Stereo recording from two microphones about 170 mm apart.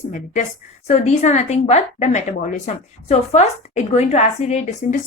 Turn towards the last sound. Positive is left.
turn(degrees=45)  # may be behind; listen again after turning